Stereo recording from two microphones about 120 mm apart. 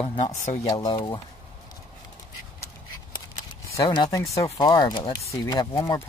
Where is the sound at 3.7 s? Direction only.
35° left (ahead or behind).